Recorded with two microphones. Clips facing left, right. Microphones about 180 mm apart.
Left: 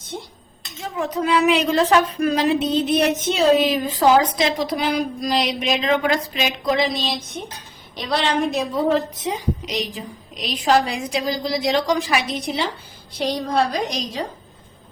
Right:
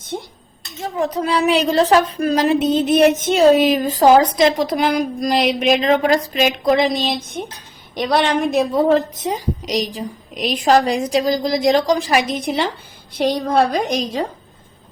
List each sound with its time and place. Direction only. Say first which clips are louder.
0.1 s a woman's voice: right 5 dB; 60° right (ahead or behind)
0.8 s a woman's voice: right 3 dB; 35° right (ahead or behind); by 8.8 s 55° right (ahead or behind)
9.2 s a woman's voice: right 2 dB; 40° right (ahead or behind)
13.1 s a woman's voice: right 4 dB; 55° right (ahead or behind)